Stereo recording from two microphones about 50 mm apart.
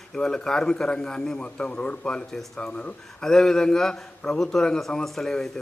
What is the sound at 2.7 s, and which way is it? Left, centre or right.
Speech, left.